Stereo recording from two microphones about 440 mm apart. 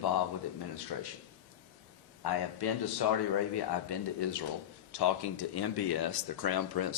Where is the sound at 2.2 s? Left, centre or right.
Left.